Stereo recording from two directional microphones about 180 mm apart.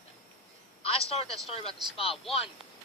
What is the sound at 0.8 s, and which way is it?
Speech, 35° left (ahead or behind).